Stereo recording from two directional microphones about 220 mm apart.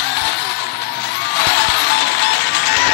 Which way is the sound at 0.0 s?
50° left (ahead or behind).